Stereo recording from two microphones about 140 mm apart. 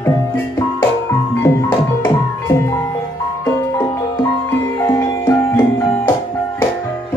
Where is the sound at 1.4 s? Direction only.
20° left (ahead or behind).